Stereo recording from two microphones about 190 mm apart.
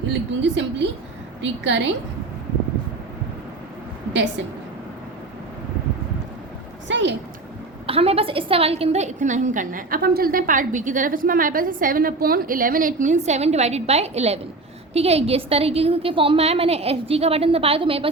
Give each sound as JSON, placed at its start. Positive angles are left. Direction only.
{"t": 0.1, "sound": "a woman's voice", "side_deg": -70}
{"t": 4.1, "sound": "a woman's voice", "side_deg": -70}
{"t": 6.8, "sound": "a woman's voice", "side_deg": -70}
{"t": 7.9, "sound": "a woman's voice", "side_deg": -30}